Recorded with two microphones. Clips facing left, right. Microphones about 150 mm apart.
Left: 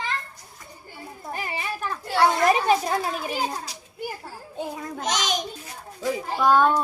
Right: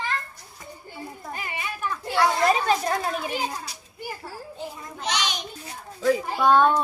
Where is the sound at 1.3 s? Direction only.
35° left (ahead or behind).